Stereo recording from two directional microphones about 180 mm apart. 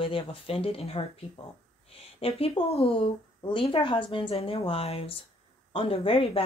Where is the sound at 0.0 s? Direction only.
30° left (ahead or behind).